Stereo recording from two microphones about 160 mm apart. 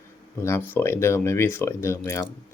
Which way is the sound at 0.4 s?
15° left (ahead or behind).